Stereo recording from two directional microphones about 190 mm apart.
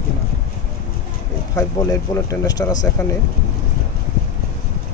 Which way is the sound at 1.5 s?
20° left (ahead or behind).